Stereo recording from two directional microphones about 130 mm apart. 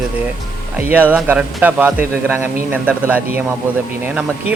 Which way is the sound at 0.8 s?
15° right (ahead or behind).